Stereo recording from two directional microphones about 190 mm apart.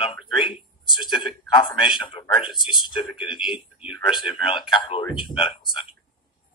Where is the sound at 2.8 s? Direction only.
Centre (ahead or behind).